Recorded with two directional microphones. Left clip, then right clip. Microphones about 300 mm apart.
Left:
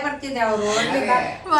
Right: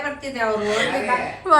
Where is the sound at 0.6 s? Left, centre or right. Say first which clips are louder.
Left 1 dB; centre.